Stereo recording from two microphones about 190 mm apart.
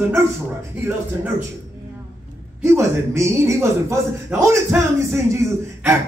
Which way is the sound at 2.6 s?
10° right (ahead or behind).